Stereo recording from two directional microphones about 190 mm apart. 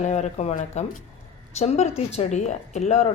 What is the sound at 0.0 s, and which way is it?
Speech, 40° left (ahead or behind).